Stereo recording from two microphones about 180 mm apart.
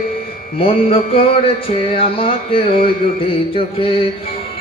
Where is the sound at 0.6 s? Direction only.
30° left (ahead or behind).